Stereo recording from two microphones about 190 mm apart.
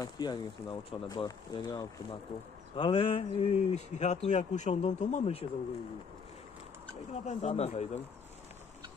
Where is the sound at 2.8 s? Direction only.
30° left (ahead or behind).